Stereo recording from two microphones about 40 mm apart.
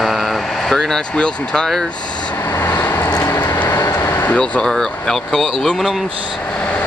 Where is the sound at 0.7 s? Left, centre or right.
Centre.